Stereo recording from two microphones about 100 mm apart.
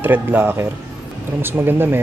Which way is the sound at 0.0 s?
20° right (ahead or behind).